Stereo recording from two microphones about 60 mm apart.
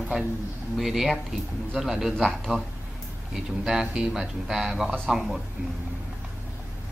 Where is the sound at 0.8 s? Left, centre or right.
Centre.